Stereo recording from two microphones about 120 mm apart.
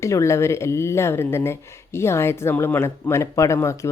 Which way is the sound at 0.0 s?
25° left (ahead or behind).